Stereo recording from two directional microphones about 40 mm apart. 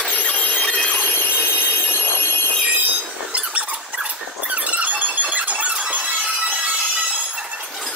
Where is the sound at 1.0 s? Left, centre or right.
Left.